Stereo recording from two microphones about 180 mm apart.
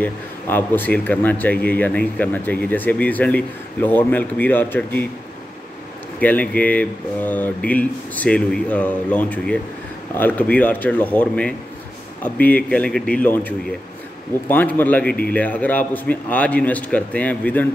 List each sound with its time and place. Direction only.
0.0 s speech: 10° left (ahead or behind)
6.1 s speech: 10° left (ahead or behind)